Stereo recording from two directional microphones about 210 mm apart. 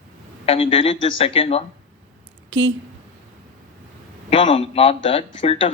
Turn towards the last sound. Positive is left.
turn(degrees=25)  # may be behind; listen again after turning